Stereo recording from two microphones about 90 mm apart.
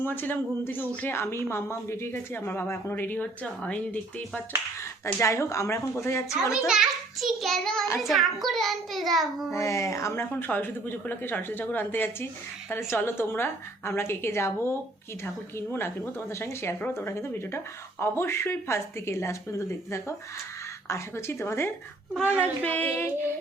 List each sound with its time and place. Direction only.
0.0 s a woman's voice: 25° left (ahead or behind)
5.2 s speech: 35° left (ahead or behind)
6.7 s a child's voice: 5° right (ahead or behind)
9.5 s a woman's voice: 35° left (ahead or behind)